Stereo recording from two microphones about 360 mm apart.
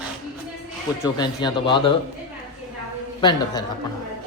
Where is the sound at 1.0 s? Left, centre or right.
Centre.